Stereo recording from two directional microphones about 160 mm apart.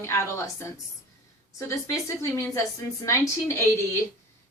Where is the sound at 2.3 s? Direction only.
15° left (ahead or behind).